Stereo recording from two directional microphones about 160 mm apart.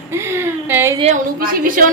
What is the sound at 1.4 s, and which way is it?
Speech, 60° right (ahead or behind).